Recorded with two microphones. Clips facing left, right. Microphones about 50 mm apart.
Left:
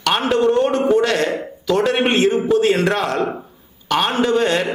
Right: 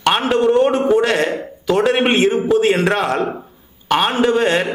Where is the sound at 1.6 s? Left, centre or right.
Centre.